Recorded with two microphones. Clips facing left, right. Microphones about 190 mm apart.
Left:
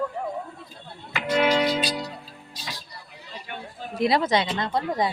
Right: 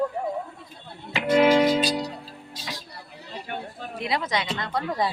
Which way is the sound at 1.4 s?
50° right (ahead or behind).